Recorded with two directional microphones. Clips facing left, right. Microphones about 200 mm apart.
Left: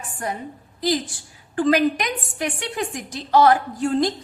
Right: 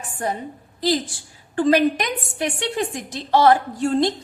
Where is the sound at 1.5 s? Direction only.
30° right (ahead or behind).